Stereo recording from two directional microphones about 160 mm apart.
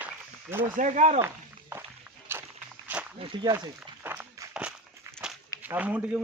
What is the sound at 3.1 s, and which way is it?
Speech, 30° right (ahead or behind).